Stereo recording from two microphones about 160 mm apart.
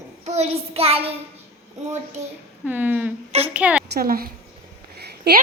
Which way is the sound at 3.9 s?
70° right (ahead or behind).